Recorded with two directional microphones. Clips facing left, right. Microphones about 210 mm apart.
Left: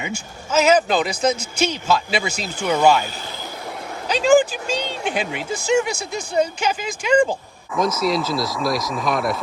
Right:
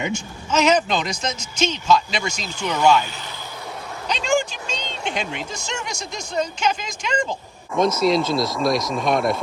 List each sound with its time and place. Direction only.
0.1 s speech: 5° left (ahead or behind)
2.7 s speech: 50° left (ahead or behind)
4.1 s speech: 5° left (ahead or behind)